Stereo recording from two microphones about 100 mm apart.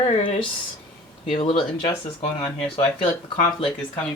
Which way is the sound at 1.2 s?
70° left (ahead or behind).